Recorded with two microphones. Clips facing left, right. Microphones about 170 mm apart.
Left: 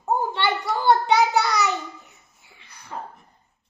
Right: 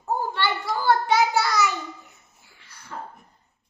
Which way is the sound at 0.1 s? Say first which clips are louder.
Left 2 dB; 20° left (ahead or behind).